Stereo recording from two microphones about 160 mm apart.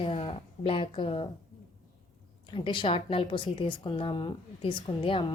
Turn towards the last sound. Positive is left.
turn(degrees=30)  # may be behind; listen again after turning